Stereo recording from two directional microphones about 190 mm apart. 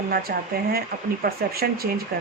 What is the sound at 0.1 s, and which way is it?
Speech, 50° right (ahead or behind).